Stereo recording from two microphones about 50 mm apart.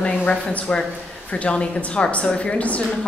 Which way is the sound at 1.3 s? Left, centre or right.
Left.